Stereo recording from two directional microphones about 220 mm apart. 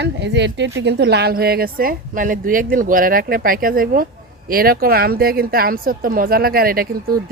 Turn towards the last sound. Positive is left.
turn(degrees=-40)  # may be behind; listen again after turning